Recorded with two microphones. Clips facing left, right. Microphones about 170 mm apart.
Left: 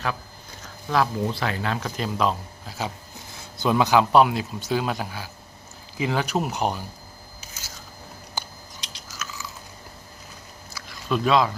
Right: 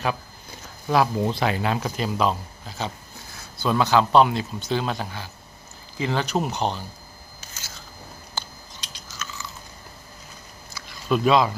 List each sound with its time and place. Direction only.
0.9 s speech: 15° right (ahead or behind)
2.0 s speech: centre (ahead or behind)
3.3 s speech: 20° left (ahead or behind)
8.4 s biting: 15° left (ahead or behind)
9.0 s a sound: 5° left (ahead or behind)
10.7 s a sound: centre (ahead or behind)